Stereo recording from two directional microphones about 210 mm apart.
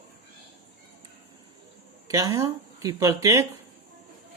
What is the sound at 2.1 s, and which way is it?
Speech, 15° right (ahead or behind).